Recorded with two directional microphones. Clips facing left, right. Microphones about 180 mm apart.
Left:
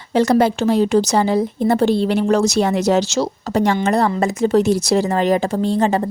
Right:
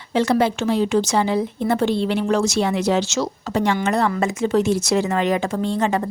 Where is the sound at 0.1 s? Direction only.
40° left (ahead or behind).